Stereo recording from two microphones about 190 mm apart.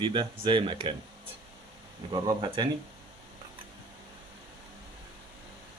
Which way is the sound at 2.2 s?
25° right (ahead or behind).